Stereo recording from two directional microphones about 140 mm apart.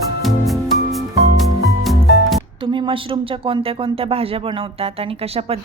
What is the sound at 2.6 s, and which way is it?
A woman's voice, 35° right (ahead or behind).